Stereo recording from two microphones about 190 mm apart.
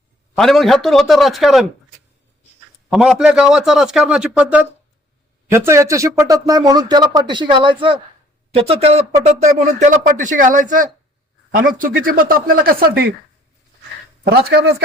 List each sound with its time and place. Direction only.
0.3 s a man's voice: centre (ahead or behind)
2.9 s a man's voice: 5° right (ahead or behind); by 10.8 s 45° right (ahead or behind)
12.0 s speech: 50° right (ahead or behind)